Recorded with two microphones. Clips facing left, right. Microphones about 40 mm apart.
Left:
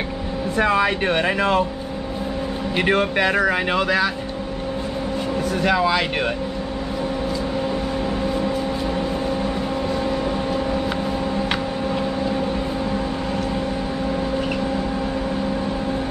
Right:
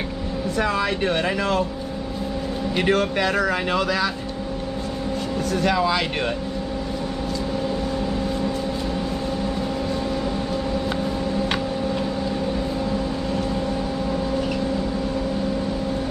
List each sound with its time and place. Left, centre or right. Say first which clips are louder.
0.6 s speech: left 4 dB; left
2.7 s speech: left 1 dB; centre
5.5 s speech: left 1 dB; centre